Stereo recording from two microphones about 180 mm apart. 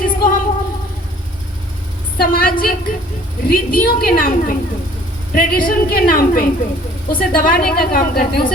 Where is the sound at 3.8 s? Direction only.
55° left (ahead or behind).